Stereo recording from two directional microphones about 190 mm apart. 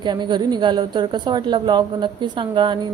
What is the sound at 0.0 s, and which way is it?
A woman's voice, 25° right (ahead or behind).